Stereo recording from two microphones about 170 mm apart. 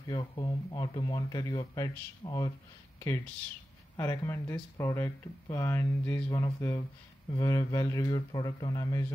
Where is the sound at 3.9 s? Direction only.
15° left (ahead or behind).